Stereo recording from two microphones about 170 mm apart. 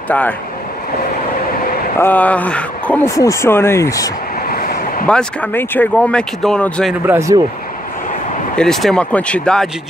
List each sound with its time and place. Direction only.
2.0 s speech: 10° left (ahead or behind)
4.5 s a sound: 60° left (ahead or behind)
5.0 s speech: 5° left (ahead or behind)
7.1 s speech: 15° right (ahead or behind)
8.5 s speech: centre (ahead or behind)